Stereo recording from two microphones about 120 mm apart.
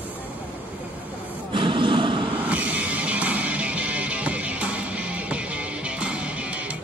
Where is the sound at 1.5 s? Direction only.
45° right (ahead or behind).